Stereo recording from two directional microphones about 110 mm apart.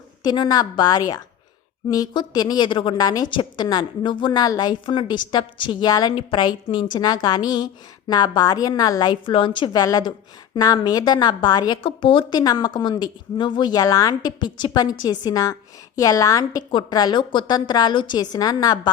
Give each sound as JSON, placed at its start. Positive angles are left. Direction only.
{"t": 0.2, "sound": "a woman's voice", "side_deg": 40}
{"t": 9.7, "sound": "a woman's voice", "side_deg": 35}
{"t": 12.4, "sound": "a woman's voice", "side_deg": 40}